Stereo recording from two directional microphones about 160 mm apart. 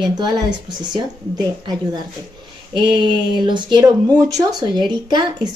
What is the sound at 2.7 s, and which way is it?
Speech, 30° right (ahead or behind).